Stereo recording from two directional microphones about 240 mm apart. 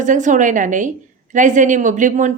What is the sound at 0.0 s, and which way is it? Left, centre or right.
A woman's voice, right.